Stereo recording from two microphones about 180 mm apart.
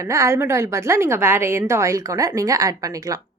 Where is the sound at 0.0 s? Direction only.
15° right (ahead or behind).